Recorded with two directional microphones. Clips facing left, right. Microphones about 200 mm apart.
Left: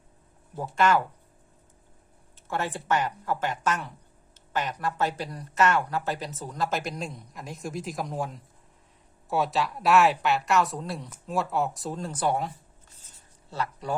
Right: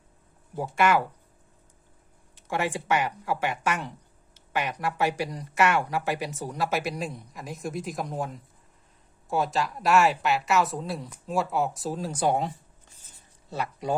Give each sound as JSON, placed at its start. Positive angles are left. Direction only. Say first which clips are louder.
{"t": 0.5, "sound": "speech", "louder": "even", "side_deg": -10}
{"t": 2.3, "sound": "speech", "louder": "right 2 dB", "side_deg": -15}